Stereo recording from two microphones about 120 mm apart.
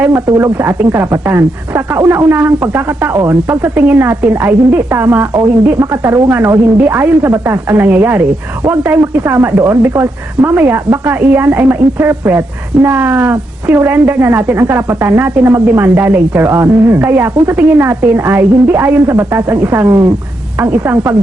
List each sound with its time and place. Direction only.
0.3 s a woman's voice: 25° right (ahead or behind)